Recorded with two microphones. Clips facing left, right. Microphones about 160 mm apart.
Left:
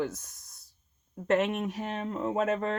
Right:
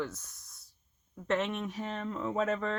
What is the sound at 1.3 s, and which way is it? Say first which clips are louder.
Speech: left 5 dB; 50° left (ahead or behind).